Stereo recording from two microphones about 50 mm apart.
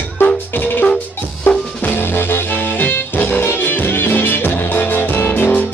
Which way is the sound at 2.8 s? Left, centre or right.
Left.